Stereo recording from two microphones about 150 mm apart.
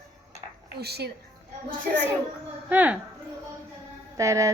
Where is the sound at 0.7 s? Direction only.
90° right.